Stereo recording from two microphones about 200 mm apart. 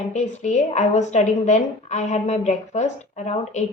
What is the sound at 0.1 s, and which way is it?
A woman's voice, 35° left (ahead or behind).